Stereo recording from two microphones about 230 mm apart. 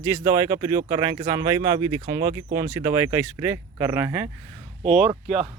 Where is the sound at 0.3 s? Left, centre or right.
Centre.